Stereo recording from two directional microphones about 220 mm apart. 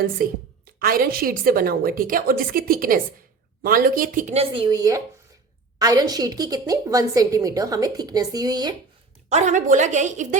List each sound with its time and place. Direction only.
0.2 s a woman's voice: 40° right (ahead or behind)
4.5 s a woman's voice: 20° right (ahead or behind)
9.3 s a woman's voice: 35° right (ahead or behind)